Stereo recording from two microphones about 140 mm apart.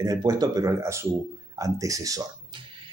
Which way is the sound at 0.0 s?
25° right (ahead or behind).